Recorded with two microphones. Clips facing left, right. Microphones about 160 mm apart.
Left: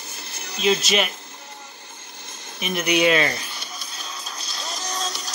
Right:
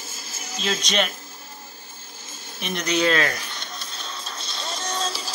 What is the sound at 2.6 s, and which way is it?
Speech, 5° left (ahead or behind).